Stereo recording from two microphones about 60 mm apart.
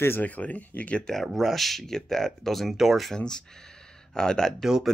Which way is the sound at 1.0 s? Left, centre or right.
Centre.